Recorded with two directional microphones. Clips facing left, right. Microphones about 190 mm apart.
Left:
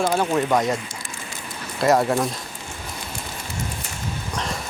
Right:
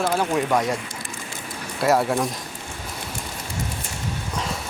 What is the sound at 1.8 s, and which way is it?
Speech, 5° right (ahead or behind).